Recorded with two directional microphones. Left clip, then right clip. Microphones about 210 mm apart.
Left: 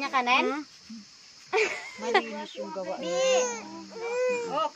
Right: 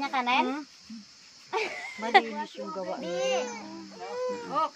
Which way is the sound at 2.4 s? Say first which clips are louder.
Left 1 dB; 20° right (ahead or behind).